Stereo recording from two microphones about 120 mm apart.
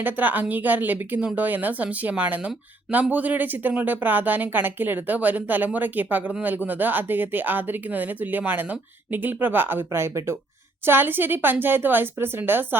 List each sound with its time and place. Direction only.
0.0 s speech: 15° right (ahead or behind)